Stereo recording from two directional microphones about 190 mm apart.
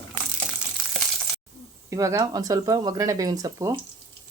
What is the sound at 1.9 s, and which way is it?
Speech, 15° right (ahead or behind).